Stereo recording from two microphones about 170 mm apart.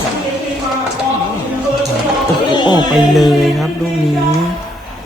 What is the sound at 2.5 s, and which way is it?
Music, 25° left (ahead or behind).